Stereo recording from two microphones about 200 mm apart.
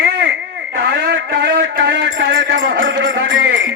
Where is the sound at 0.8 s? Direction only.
55° right (ahead or behind); by 3.7 s 70° right (ahead or behind).